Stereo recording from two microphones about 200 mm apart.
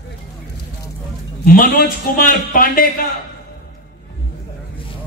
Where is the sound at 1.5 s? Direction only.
45° left (ahead or behind).